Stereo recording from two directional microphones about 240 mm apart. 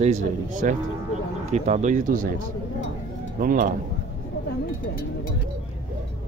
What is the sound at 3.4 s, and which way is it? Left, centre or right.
Speech, right.